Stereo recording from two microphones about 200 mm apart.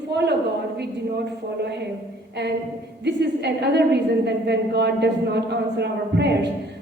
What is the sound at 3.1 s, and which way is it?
A woman's voice, 55° right (ahead or behind).